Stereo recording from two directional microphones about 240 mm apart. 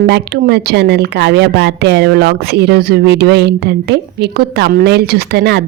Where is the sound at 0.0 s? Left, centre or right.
Right.